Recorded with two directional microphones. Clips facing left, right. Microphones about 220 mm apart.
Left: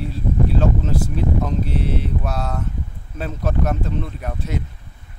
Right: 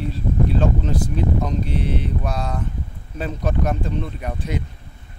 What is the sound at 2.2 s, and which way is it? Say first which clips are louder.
Speech: even; 5° left (ahead or behind).